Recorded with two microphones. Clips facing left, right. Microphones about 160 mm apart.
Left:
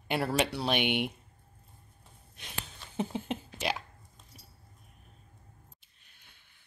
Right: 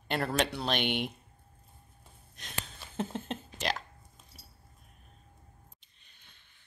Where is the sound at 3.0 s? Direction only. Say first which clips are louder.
Left 2 dB; 10° left (ahead or behind).